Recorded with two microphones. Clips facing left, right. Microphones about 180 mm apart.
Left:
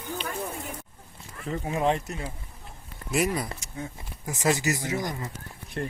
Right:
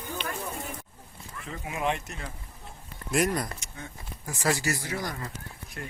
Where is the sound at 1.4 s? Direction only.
35° left (ahead or behind).